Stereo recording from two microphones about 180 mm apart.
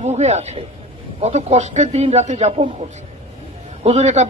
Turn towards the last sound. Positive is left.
turn(degrees=-40)  # may be behind; listen again after turning